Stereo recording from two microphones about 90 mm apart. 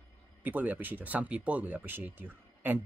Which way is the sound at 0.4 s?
20° right (ahead or behind).